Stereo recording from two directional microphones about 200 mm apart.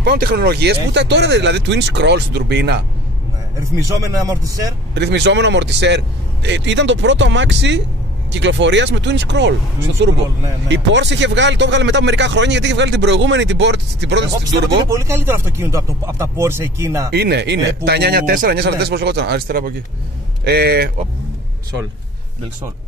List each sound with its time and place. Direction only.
0.0 s speech: 50° right (ahead or behind)
3.9 s speech: 15° right (ahead or behind)
4.9 s speech: 60° right (ahead or behind)
10.7 s speech: 60° right (ahead or behind)
14.9 s speech: 15° right (ahead or behind)
17.1 s a man's voice: 55° right (ahead or behind)